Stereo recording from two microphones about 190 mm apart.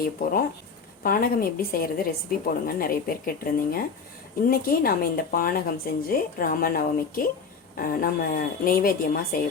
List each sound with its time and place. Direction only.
0.0 s speech: 50° left (ahead or behind)